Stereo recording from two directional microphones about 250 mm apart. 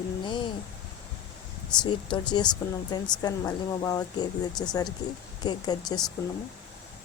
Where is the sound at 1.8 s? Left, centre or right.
Centre.